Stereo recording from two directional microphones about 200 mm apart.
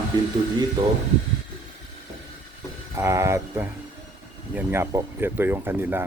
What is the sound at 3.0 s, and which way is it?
Speech, 15° right (ahead or behind).